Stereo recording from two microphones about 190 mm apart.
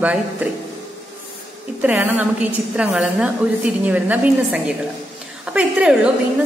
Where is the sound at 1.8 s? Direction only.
10° right (ahead or behind).